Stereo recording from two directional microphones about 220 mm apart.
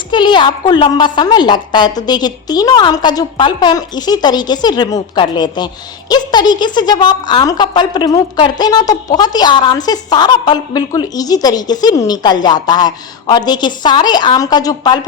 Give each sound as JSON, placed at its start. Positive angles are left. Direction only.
{"t": 0.1, "sound": "a woman's voice", "side_deg": 20}